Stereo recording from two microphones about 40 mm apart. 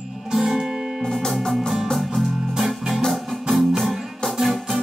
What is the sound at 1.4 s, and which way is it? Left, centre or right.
Music, centre.